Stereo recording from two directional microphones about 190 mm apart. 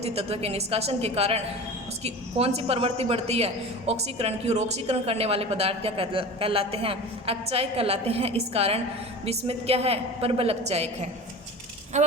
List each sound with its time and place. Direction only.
0.0 s a woman's voice: 35° right (ahead or behind)